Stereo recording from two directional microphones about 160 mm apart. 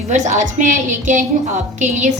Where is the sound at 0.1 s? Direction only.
50° right (ahead or behind).